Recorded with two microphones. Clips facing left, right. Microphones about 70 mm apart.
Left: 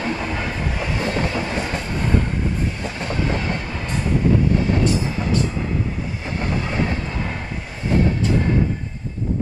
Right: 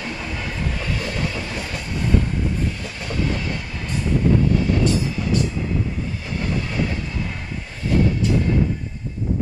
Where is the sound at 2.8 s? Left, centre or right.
Left.